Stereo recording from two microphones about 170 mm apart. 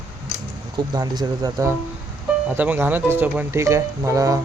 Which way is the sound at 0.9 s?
25° right (ahead or behind).